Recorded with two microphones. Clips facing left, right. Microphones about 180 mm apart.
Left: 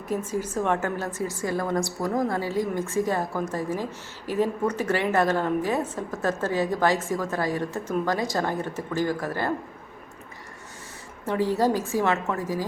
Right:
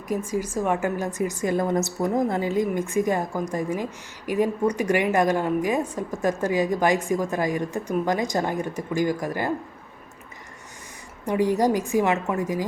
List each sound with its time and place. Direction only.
0.3 s a woman's voice: 10° right (ahead or behind)
11.3 s a woman's voice: 15° right (ahead or behind)